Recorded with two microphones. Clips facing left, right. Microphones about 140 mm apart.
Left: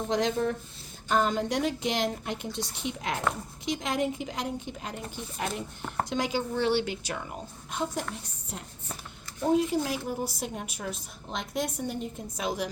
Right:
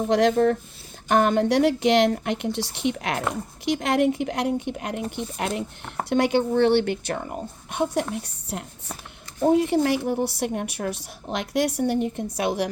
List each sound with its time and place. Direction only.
0.1 s speech: 65° right (ahead or behind)